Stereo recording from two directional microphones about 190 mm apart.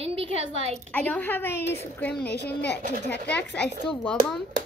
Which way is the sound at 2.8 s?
40° right (ahead or behind).